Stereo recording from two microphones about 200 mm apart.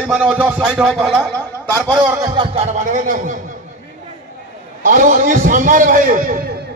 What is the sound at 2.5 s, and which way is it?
Speech, 35° right (ahead or behind).